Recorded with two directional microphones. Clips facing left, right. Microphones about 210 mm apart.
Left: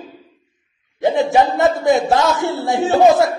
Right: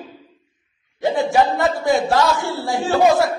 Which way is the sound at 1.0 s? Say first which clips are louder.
Left 2 dB; 20° left (ahead or behind).